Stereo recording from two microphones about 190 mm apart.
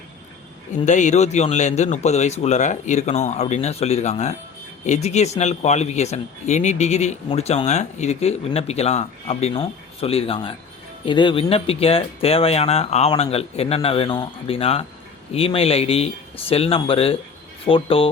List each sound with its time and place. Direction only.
0.9 s speech: 40° left (ahead or behind)